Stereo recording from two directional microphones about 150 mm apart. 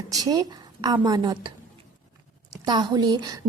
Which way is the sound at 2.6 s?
30° right (ahead or behind).